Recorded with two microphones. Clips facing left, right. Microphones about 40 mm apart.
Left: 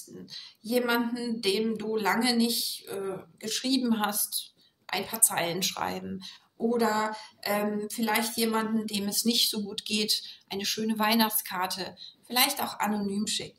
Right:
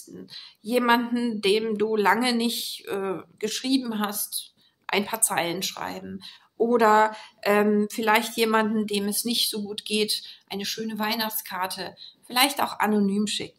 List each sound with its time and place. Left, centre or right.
0.1 s speech: right
0.7 s a woman's voice: right
3.8 s a woman's voice: centre
4.8 s a woman's voice: right
5.3 s speech: centre
5.6 s a woman's voice: centre
6.6 s speech: right
8.0 s a woman's voice: right
8.3 s speech: right
8.5 s a woman's voice: right
9.0 s speech: centre
10.6 s a woman's voice: centre
12.4 s a woman's voice: right